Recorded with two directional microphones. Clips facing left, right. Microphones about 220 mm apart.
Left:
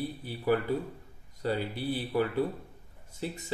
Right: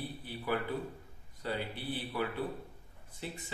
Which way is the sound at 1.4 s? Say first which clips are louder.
Left 6 dB; 40° left (ahead or behind).